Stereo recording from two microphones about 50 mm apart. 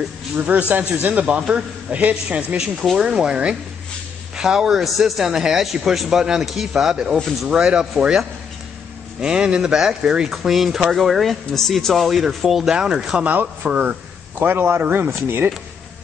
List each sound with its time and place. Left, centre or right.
0.5 s a man's voice: right
2.5 s a man's voice: centre
7.4 s a man's voice: centre
9.2 s a man's voice: centre
10.3 s speech: centre
12.7 s a man's voice: centre
13.2 s speech: right
14.4 s a man's voice: right